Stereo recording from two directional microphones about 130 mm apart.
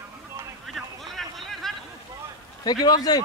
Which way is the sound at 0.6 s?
Centre (ahead or behind).